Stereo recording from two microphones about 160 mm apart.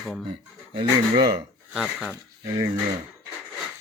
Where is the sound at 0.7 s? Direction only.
30° right (ahead or behind).